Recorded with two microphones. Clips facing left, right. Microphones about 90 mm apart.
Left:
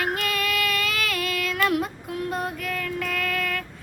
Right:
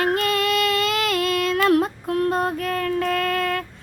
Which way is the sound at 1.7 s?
50° right (ahead or behind).